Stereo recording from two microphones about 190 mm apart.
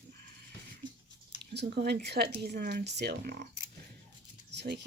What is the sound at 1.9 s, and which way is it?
Speech, 60° right (ahead or behind).